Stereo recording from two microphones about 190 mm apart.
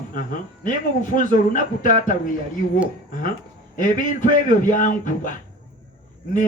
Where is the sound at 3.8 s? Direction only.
45° left (ahead or behind).